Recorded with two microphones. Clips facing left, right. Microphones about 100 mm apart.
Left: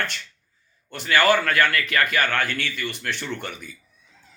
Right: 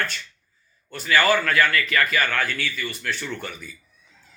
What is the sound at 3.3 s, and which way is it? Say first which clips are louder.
Speech: left 1 dB; 60° left (ahead or behind).